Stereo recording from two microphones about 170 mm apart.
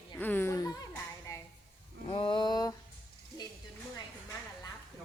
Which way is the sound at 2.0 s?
30° left (ahead or behind).